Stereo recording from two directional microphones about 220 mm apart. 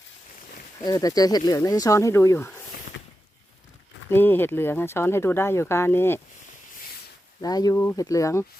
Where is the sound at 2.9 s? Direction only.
55° left (ahead or behind).